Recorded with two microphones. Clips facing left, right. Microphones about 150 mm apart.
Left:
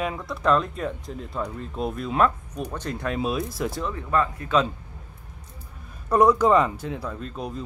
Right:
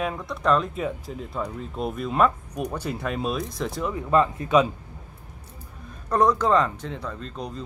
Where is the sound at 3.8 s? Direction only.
15° right (ahead or behind).